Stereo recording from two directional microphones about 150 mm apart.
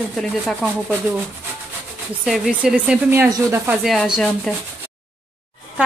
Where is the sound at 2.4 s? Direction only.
5° right (ahead or behind).